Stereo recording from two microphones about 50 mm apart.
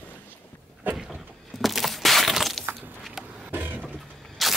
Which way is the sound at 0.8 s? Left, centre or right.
Right.